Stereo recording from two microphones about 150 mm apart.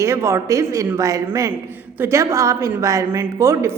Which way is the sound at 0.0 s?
20° right (ahead or behind).